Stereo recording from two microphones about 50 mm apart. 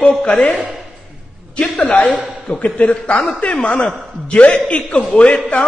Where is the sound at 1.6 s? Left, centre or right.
Left.